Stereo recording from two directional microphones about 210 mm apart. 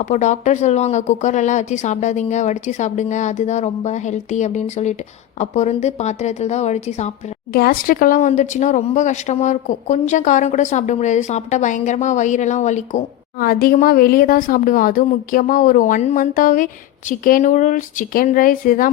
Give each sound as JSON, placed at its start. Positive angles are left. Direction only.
{"t": 0.0, "sound": "speech", "side_deg": 35}
{"t": 7.5, "sound": "speech", "side_deg": 45}